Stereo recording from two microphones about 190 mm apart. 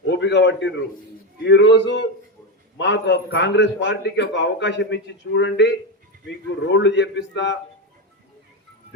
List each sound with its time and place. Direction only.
0.1 s a man's voice: 70° left (ahead or behind)